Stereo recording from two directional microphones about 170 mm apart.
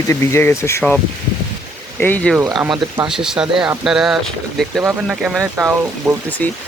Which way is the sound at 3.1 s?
5° right (ahead or behind).